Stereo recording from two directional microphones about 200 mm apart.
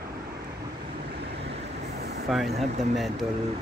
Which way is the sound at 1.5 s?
50° right (ahead or behind).